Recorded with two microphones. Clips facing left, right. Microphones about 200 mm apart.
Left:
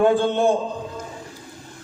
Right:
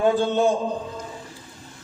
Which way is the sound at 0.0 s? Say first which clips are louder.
Left 2 dB; 55° left (ahead or behind).